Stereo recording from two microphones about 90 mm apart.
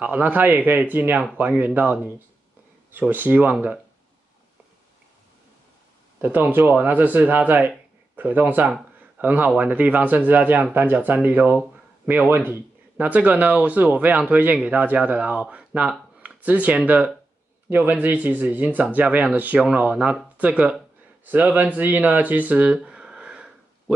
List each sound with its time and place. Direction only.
0.0 s speech: 20° right (ahead or behind)
6.2 s speech: 20° right (ahead or behind)